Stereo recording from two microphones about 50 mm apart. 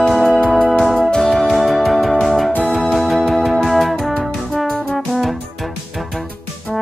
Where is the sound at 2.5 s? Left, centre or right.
Left.